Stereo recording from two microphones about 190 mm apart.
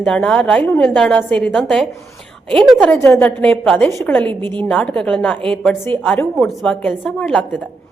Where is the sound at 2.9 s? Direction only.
10° left (ahead or behind).